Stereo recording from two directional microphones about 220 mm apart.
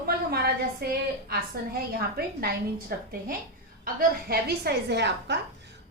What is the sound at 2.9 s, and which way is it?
A woman's voice, 40° right (ahead or behind).